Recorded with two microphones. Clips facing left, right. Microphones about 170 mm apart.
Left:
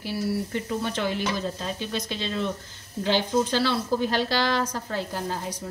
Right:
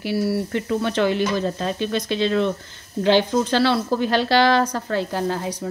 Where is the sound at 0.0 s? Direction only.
70° right (ahead or behind).